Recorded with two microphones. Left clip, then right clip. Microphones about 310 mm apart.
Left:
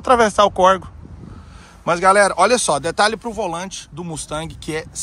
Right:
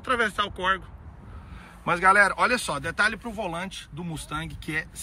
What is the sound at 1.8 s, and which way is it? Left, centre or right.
Speech, centre.